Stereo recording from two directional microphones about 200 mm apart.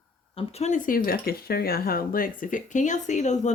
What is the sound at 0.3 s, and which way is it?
Speech, 30° left (ahead or behind).